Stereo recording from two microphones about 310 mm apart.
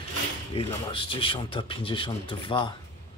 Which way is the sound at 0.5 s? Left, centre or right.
Centre.